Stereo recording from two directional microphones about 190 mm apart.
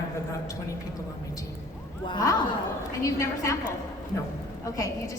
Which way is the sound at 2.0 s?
20° left (ahead or behind).